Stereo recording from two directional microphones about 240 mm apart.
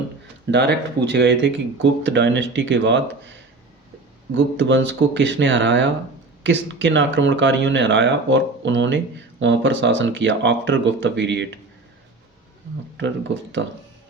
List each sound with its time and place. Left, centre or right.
0.5 s speech: right
4.4 s speech: right